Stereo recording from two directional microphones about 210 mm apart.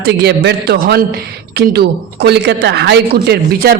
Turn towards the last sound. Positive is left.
turn(degrees=-50)  # may be behind; listen again after turning